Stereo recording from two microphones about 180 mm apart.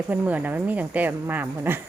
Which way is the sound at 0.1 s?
10° right (ahead or behind).